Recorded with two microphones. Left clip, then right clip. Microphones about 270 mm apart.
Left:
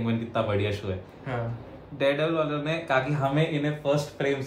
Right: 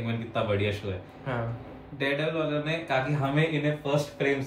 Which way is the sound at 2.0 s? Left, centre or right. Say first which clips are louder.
Left 4 dB; centre.